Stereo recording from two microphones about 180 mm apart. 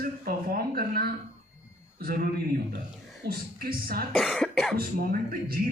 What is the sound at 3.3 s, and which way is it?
Speech, 55° right (ahead or behind).